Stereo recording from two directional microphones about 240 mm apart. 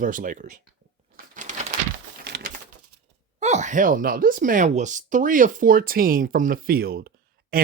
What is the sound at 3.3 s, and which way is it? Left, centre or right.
Speech, right.